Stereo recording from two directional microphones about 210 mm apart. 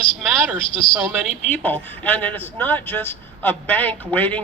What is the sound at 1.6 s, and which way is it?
A man's voice, 10° left (ahead or behind).